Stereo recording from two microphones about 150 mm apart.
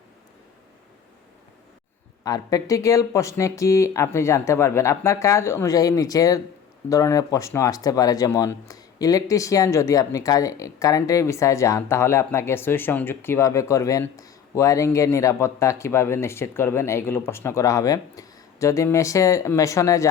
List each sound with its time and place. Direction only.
2.2 s speech: 25° left (ahead or behind)